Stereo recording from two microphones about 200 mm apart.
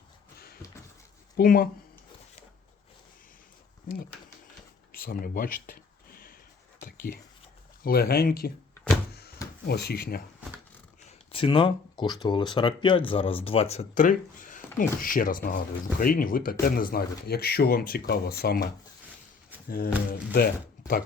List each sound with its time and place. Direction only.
0.3 s a sound: 50° left (ahead or behind)
1.4 s speech: 50° left (ahead or behind)
4.9 s a sound: 45° left (ahead or behind)
7.9 s speech: 50° left (ahead or behind)
8.7 s power windows: 5° left (ahead or behind)
9.6 s speech: 55° left (ahead or behind)
11.3 s speech: 25° left (ahead or behind); by 21.0 s 50° left (ahead or behind)